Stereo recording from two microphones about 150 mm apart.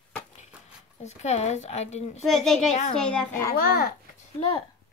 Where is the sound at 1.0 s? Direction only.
50° left (ahead or behind).